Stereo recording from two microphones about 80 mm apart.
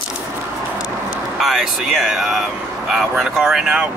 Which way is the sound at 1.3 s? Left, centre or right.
Centre.